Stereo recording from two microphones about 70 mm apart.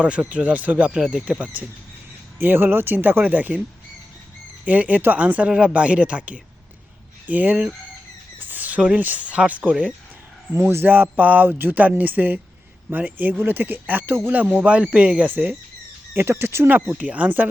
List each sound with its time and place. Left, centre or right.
0.0 s speech: centre
0.9 s speech: centre
2.4 s speech: right
4.6 s speech: right
8.4 s a sound: right
9.0 s speech: right
10.5 s speech: right
14.5 s speech: centre; by 16.7 s right
16.9 s speech: right